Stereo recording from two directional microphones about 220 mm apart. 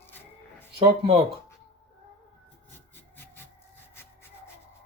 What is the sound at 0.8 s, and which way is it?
Speech, 25° right (ahead or behind).